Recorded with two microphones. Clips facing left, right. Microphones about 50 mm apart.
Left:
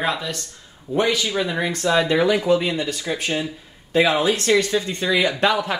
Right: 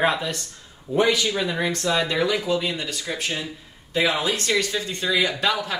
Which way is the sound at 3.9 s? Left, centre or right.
Left.